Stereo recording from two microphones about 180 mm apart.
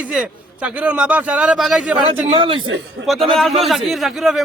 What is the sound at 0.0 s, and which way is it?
A man's voice, 5° right (ahead or behind).